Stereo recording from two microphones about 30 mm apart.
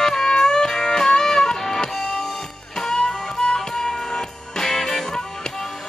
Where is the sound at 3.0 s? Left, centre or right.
Left.